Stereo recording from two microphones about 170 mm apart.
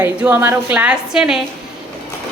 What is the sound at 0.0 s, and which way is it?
A woman's voice, 10° right (ahead or behind).